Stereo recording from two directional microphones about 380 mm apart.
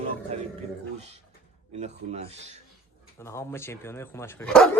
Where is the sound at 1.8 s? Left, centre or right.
Centre.